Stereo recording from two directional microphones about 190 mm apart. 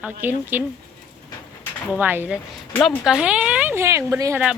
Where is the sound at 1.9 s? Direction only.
10° right (ahead or behind).